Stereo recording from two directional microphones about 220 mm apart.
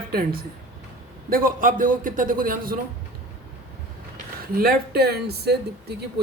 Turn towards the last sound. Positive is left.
turn(degrees=-45)  # may be behind; listen again after turning